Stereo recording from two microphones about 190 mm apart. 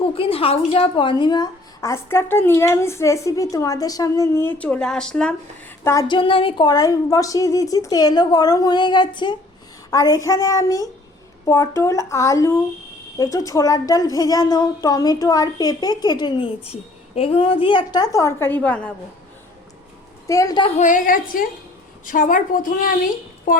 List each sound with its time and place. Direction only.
0.0 s a woman's voice: 30° left (ahead or behind); by 18.9 s 10° left (ahead or behind)
20.2 s a woman's voice: 20° left (ahead or behind)
20.7 s a woman's voice: 40° left (ahead or behind)